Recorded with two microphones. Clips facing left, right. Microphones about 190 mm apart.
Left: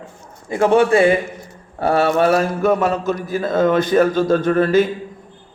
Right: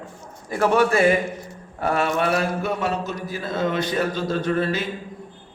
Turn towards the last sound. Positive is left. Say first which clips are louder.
# left 8 dB
turn(degrees=50)  # may be behind; listen again after turning